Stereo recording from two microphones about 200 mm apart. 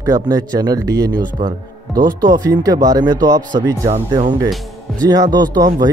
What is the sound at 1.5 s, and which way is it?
Speech, 45° right (ahead or behind).